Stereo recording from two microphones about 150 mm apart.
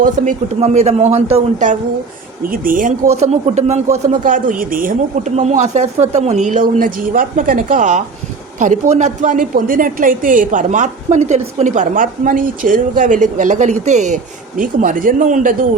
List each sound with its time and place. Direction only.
0.2 s a woman's voice: 55° right (ahead or behind)
0.6 s speech: 45° right (ahead or behind)
2.5 s speech: 65° right (ahead or behind); by 4.1 s 50° right (ahead or behind)
4.2 s a woman's voice: 65° right (ahead or behind)
14.6 s a woman's voice: 65° right (ahead or behind)